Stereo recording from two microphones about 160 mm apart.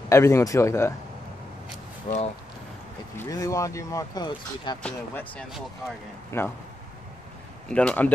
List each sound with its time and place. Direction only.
0.1 s speech: 20° left (ahead or behind)
2.1 s speech: 45° left (ahead or behind)
3.2 s speech: 20° left (ahead or behind)
4.8 s speech: 10° left (ahead or behind)
7.6 s speech: 5° left (ahead or behind)